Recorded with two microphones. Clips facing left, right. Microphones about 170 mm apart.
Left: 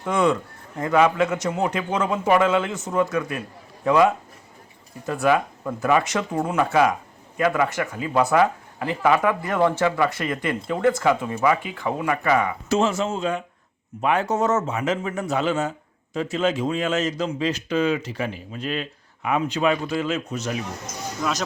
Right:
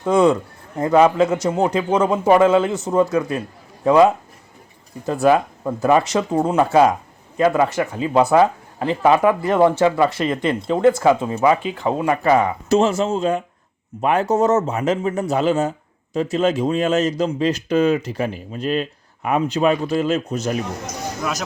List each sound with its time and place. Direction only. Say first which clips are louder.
0.0 s speech: right 6 dB; 30° right (ahead or behind)